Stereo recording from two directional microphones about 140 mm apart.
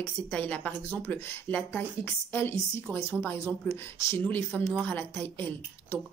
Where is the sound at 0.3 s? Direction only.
10° left (ahead or behind).